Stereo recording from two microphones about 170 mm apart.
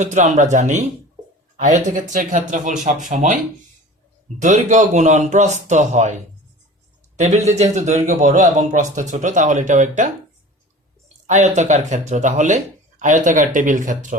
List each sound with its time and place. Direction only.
0.0 s speech: 45° right (ahead or behind)
4.4 s speech: 45° right (ahead or behind)
7.2 s speech: 45° right (ahead or behind)
11.3 s speech: 45° right (ahead or behind)